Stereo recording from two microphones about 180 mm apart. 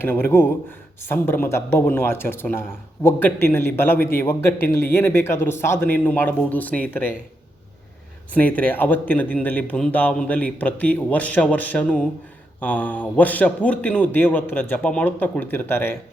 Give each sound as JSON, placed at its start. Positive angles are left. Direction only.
{"t": 0.0, "sound": "speech", "side_deg": 10}
{"t": 8.3, "sound": "speech", "side_deg": 10}